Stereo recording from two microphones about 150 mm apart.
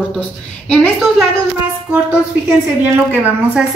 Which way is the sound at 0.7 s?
5° left (ahead or behind).